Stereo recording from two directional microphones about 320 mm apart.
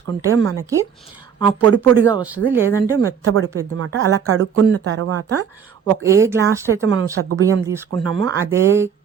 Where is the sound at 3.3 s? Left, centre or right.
Right.